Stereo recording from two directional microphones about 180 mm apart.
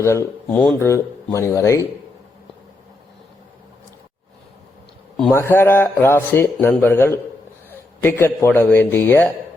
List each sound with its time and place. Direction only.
0.0 s a man's voice: 15° left (ahead or behind)
5.3 s a man's voice: 15° left (ahead or behind)